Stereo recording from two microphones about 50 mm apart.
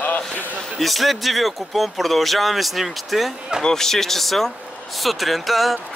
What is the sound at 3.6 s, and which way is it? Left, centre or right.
Speech, centre.